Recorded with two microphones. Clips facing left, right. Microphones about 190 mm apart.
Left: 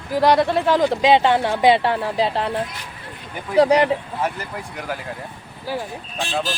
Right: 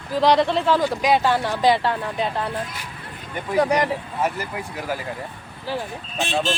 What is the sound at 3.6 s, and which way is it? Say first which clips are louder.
Speech: left 5 dB; 30° left (ahead or behind).